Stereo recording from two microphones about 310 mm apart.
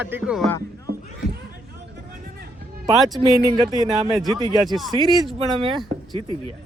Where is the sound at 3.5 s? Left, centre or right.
Centre.